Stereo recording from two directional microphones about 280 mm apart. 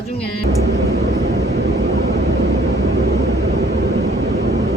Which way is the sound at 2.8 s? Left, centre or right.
Right.